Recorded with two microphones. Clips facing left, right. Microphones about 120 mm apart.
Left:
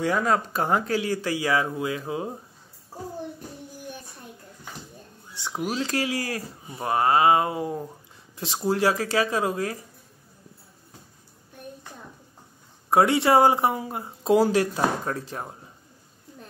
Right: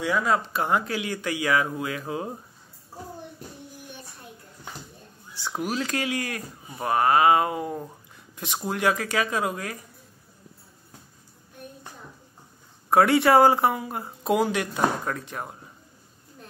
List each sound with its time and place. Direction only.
0.0 s speech: 40° left (ahead or behind); by 2.2 s 25° left (ahead or behind)
5.6 s speech: 25° left (ahead or behind)
12.9 s speech: 25° left (ahead or behind)